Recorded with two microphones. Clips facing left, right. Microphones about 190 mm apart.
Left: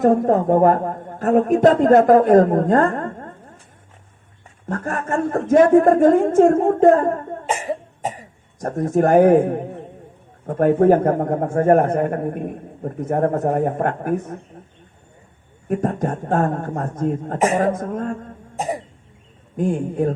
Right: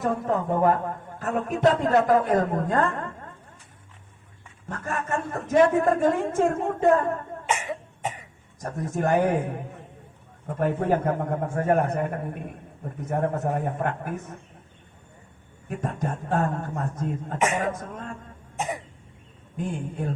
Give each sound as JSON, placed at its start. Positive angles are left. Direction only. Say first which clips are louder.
{"t": 0.0, "sound": "a man's voice", "louder": "left 10 dB", "side_deg": 50}
{"t": 4.7, "sound": "a woman's voice", "louder": "left 6 dB", "side_deg": 45}
{"t": 15.7, "sound": "a man's voice", "louder": "left 9 dB", "side_deg": 45}
{"t": 18.5, "sound": "cough", "louder": "left 6 dB", "side_deg": 40}
{"t": 19.5, "sound": "a man's voice", "louder": "left 10 dB", "side_deg": 45}